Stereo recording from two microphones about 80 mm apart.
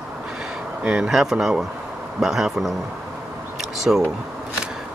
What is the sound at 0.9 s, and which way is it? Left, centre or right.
Speech, centre.